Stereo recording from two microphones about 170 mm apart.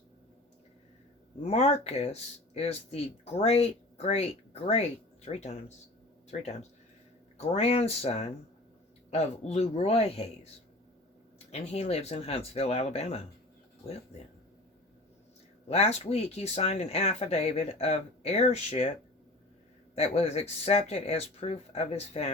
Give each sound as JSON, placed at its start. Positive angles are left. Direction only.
{"t": 1.5, "sound": "speech", "side_deg": 40}
{"t": 11.5, "sound": "speech", "side_deg": 40}
{"t": 15.7, "sound": "speech", "side_deg": 40}
{"t": 20.0, "sound": "speech", "side_deg": 35}